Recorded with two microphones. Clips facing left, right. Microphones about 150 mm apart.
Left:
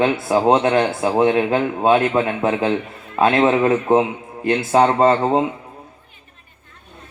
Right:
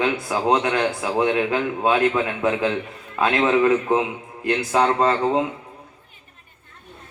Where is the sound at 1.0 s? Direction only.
45° left (ahead or behind); by 2.0 s 30° left (ahead or behind).